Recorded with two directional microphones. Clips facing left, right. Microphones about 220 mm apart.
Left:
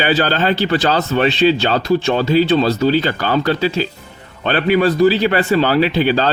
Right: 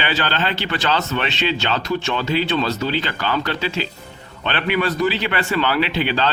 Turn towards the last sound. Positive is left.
turn(degrees=40)  # may be behind; listen again after turning